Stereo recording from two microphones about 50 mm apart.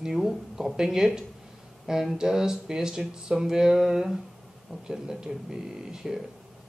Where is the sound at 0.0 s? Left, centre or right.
Centre.